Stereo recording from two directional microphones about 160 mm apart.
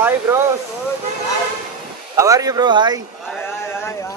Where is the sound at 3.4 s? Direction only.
15° left (ahead or behind).